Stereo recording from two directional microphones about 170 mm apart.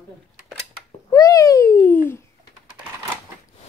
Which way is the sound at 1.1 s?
20° left (ahead or behind).